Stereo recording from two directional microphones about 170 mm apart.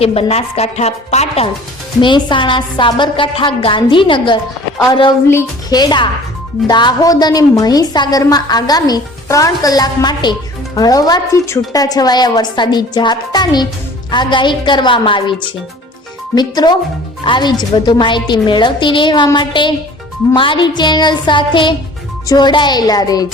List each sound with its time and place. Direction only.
0.0 s a woman's voice: 35° left (ahead or behind)
2.0 s a woman's voice: 30° left (ahead or behind)